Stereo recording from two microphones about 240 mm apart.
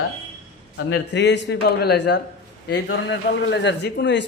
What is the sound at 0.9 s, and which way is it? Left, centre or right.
A man's voice, left.